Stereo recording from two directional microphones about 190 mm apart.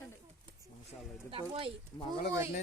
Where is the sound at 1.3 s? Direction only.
30° right (ahead or behind).